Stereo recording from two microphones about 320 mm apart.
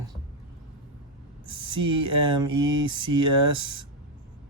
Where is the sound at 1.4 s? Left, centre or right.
Centre.